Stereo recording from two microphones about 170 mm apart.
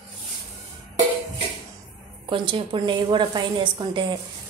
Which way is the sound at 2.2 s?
30° right (ahead or behind).